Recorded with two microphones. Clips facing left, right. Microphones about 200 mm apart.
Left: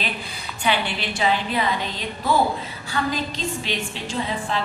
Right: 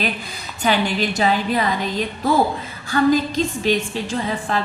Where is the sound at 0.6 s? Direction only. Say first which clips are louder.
Right 5 dB; 40° right (ahead or behind).